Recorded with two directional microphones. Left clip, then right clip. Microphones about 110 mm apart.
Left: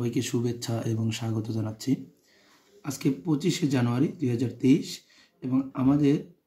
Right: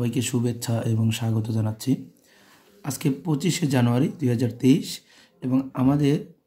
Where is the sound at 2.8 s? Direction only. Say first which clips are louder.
Right 2 dB; 55° right (ahead or behind).